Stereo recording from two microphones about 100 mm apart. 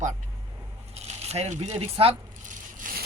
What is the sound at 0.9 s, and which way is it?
Speech, 90° right.